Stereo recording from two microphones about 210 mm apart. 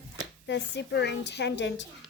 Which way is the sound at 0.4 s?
55° left (ahead or behind).